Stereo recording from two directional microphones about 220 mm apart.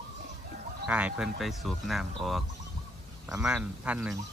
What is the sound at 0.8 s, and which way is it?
Speech, 5° right (ahead or behind).